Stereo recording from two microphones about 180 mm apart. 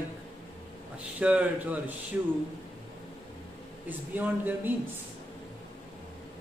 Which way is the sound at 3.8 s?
10° right (ahead or behind).